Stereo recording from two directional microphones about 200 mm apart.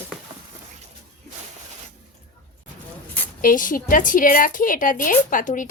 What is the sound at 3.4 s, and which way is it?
Speech, 45° left (ahead or behind).